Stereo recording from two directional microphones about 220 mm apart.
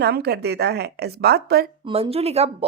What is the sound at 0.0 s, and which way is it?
A woman's voice, 45° right (ahead or behind).